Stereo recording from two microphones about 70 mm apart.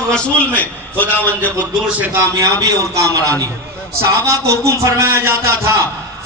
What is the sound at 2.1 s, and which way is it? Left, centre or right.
A man's voice, right.